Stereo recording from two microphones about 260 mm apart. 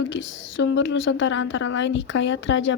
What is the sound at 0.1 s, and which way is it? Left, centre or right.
A woman's voice, left.